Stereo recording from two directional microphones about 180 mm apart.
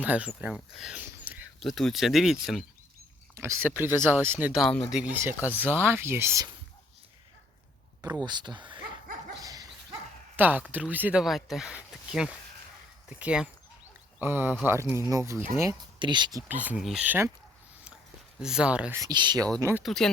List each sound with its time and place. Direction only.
0.0 s speech: 10° right (ahead or behind)
3.3 s speech: 15° right (ahead or behind)
8.0 s speech: 20° right (ahead or behind)
9.4 s dog: 20° right (ahead or behind)
10.3 s speech: 10° right (ahead or behind); by 16.4 s 25° right (ahead or behind)
16.5 s speech: 10° right (ahead or behind)
18.3 s speech: 5° right (ahead or behind)
18.9 s speech: 20° right (ahead or behind)
19.8 s speech: centre (ahead or behind)